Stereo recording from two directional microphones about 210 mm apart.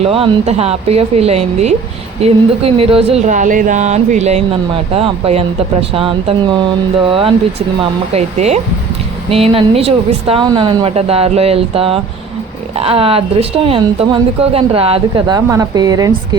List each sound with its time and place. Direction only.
0.0 s speech: 25° right (ahead or behind)